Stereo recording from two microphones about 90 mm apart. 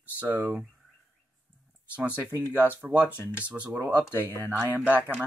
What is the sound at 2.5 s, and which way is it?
Speech, 20° right (ahead or behind).